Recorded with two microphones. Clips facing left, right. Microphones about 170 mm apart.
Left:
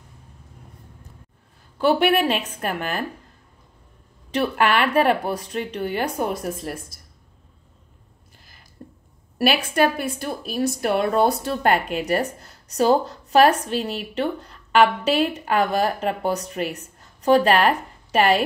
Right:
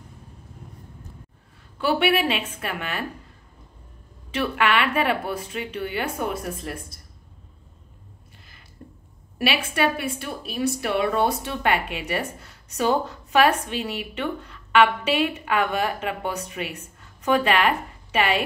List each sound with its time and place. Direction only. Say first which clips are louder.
1.8 s a woman's voice: left 3 dB; 40° left (ahead or behind)
4.3 s a woman's voice: left 3 dB; 40° left (ahead or behind)
8.8 s a sound: left 2 dB; 35° left (ahead or behind)
9.4 s a woman's voice: left 4 dB; 40° left (ahead or behind)